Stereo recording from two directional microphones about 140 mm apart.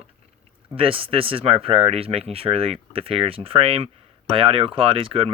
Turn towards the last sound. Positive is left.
turn(degrees=-40)  # may be behind; listen again after turning